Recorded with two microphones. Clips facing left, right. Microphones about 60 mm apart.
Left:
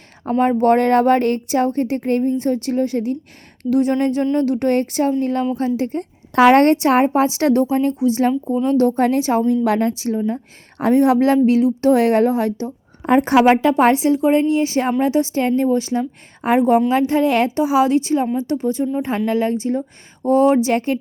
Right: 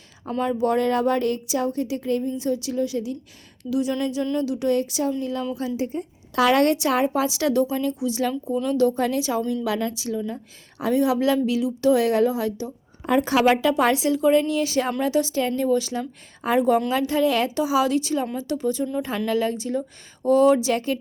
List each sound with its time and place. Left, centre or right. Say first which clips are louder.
0.3 s a woman's voice: left 8 dB; left